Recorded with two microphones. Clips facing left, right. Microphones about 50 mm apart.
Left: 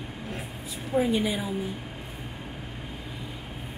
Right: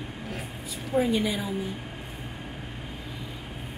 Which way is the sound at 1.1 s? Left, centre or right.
Centre.